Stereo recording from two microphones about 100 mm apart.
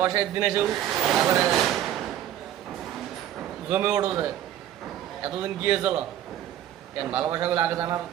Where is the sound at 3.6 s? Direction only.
15° right (ahead or behind).